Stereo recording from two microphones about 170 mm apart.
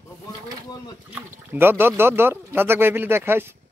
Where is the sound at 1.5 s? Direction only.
15° right (ahead or behind).